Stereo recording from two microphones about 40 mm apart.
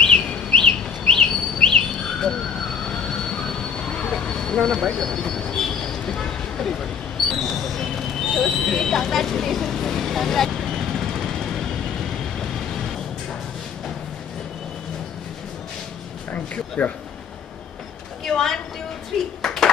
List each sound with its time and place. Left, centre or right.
0.0 s bird: left
3.3 s vehicle: centre
4.6 s train: centre
7.2 s a sound: centre
16.8 s speech: left
18.2 s a sound: centre
19.4 s clapping: centre